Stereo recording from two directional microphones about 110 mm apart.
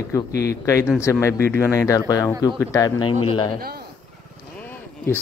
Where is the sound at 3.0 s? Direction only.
55° left (ahead or behind).